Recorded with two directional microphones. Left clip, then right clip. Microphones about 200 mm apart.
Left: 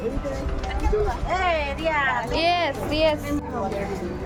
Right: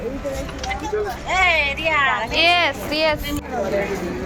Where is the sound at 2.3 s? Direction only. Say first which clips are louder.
Right 7 dB; 10° left (ahead or behind).